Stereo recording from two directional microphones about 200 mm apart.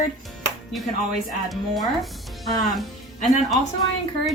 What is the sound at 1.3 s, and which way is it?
Speech, centre (ahead or behind).